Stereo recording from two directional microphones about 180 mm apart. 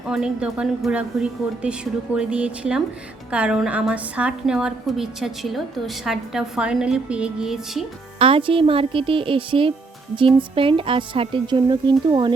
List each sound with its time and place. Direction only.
0.1 s a woman's voice: 5° right (ahead or behind)
8.2 s speech: 30° right (ahead or behind)